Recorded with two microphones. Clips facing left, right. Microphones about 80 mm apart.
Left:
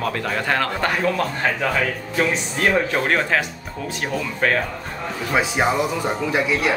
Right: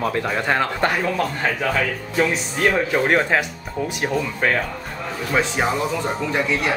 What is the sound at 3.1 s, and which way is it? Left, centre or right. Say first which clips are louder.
Speech: right 2 dB; right.